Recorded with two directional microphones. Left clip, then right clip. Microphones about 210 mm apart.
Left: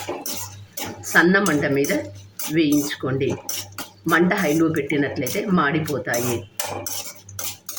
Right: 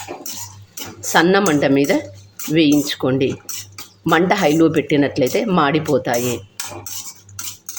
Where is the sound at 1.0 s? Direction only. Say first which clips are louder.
Right 3 dB; 40° right (ahead or behind).